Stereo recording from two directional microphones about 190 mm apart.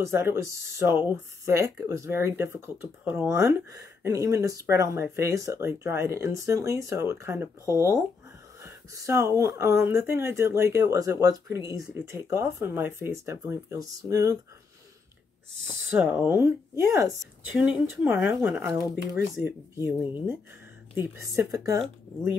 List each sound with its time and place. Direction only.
0.0 s speech: 15° right (ahead or behind)
15.6 s speech: 5° right (ahead or behind)